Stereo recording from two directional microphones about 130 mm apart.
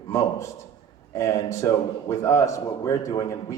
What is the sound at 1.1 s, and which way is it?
A man's voice, 25° left (ahead or behind).